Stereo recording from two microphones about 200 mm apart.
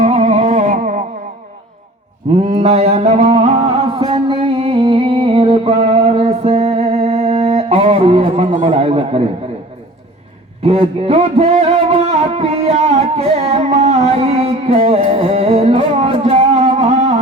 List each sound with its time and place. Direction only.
0.0 s carnatic music: 35° right (ahead or behind)
2.5 s music: 30° right (ahead or behind)
10.6 s speech: 30° right (ahead or behind)